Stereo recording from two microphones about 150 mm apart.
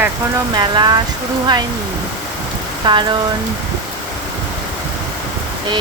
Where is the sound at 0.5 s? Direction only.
30° right (ahead or behind).